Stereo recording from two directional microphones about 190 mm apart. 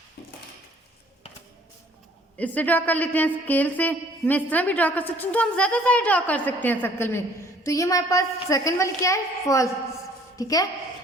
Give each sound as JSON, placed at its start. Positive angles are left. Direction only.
{"t": 2.4, "sound": "a woman's voice", "side_deg": 10}